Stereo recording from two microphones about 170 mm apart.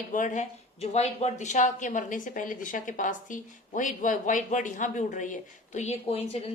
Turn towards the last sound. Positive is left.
turn(degrees=35)  # may be behind; listen again after turning